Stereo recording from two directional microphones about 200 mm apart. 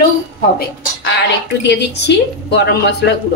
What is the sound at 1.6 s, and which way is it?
A woman's voice, 60° left (ahead or behind).